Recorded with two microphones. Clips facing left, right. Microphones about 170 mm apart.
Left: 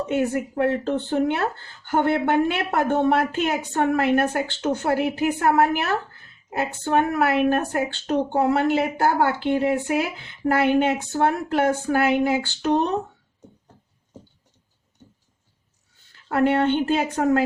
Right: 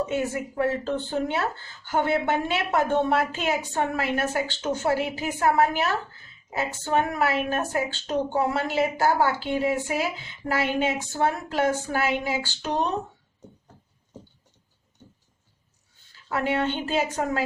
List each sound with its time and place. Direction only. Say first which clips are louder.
0.1 s speech: left 4 dB; 55° left (ahead or behind)
16.1 s speech: left 6 dB; 60° left (ahead or behind)